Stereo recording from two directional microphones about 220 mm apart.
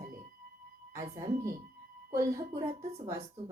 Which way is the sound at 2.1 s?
10° right (ahead or behind).